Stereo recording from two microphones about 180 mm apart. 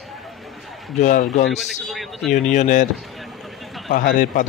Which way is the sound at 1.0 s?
45° left (ahead or behind).